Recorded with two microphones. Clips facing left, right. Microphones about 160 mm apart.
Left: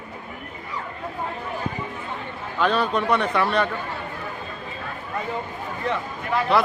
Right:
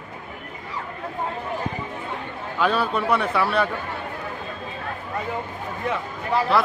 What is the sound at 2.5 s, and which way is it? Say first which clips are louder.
A man's voice: left 1 dB; 10° right (ahead or behind).